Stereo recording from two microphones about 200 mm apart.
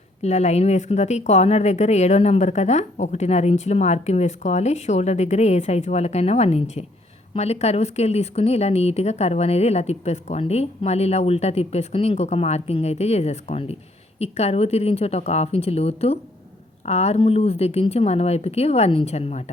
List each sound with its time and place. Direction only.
0.2 s a woman's voice: 35° left (ahead or behind)